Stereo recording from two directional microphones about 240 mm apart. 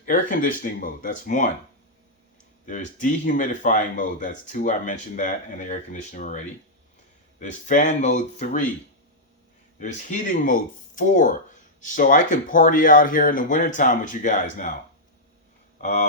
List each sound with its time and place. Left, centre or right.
0.0 s speech: left
2.6 s speech: left
9.8 s speech: left
15.8 s speech: left